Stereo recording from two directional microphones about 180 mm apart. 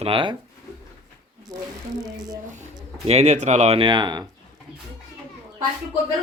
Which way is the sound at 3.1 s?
40° right (ahead or behind).